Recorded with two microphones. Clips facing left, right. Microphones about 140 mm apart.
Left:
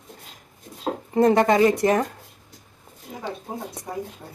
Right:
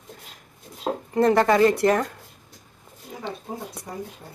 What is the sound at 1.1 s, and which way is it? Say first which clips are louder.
Speech: left 1 dB; 20° left (ahead or behind).